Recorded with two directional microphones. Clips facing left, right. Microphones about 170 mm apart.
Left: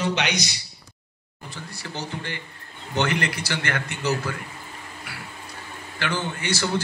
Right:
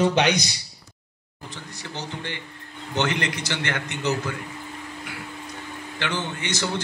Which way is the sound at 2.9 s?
20° right (ahead or behind).